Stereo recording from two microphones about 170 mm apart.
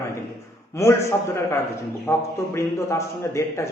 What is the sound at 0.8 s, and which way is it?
A man's voice, 15° left (ahead or behind).